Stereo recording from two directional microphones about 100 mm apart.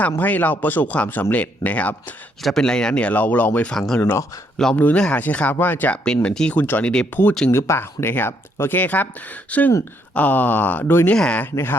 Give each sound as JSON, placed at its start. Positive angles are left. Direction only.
{"t": 0.0, "sound": "speech", "side_deg": 15}
{"t": 2.4, "sound": "speech", "side_deg": 5}
{"t": 4.0, "sound": "speech", "side_deg": 30}
{"t": 4.5, "sound": "speech", "side_deg": 10}
{"t": 7.5, "sound": "speech", "side_deg": 25}
{"t": 11.5, "sound": "speech", "side_deg": 20}